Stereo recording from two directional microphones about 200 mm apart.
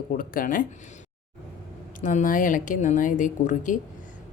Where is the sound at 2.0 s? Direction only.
40° left (ahead or behind).